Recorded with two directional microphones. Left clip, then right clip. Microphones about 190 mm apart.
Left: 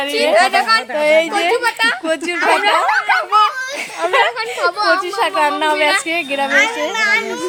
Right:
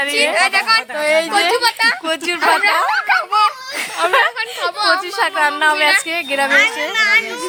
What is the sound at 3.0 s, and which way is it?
Speech, 15° left (ahead or behind).